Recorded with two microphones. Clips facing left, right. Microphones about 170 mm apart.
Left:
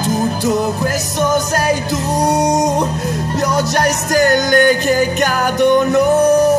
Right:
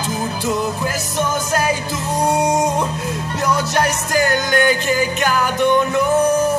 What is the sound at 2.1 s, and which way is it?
Music, 40° left (ahead or behind).